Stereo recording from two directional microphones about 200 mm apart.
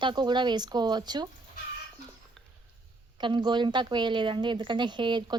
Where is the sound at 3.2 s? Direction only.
25° right (ahead or behind).